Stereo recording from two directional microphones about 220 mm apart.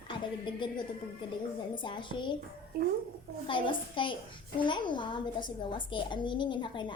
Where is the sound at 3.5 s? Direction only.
20° left (ahead or behind).